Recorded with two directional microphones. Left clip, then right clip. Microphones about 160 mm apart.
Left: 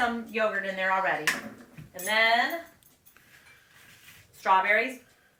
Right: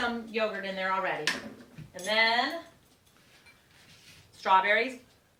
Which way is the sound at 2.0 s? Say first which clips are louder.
Left 2 dB; 10° right (ahead or behind).